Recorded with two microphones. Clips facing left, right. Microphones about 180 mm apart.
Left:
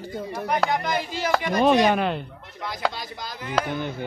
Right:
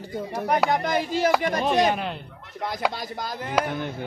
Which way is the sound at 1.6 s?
65° left (ahead or behind).